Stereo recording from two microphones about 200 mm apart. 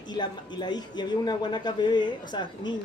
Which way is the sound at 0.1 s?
20° left (ahead or behind).